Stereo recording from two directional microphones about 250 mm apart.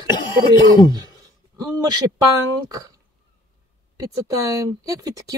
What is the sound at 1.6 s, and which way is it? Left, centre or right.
Speech, centre.